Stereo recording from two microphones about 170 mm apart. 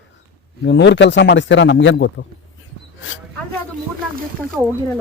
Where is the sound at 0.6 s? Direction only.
90° left.